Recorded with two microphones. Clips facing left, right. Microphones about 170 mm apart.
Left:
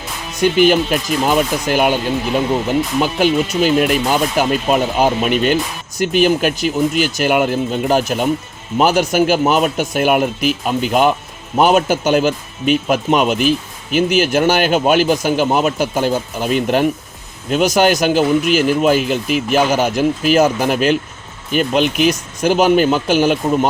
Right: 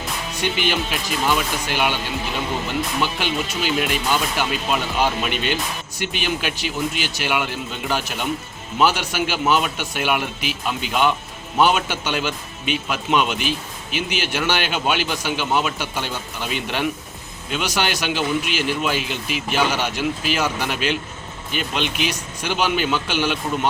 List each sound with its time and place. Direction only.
0.4 s speech: 45° left (ahead or behind)
3.0 s speech: 45° left (ahead or behind)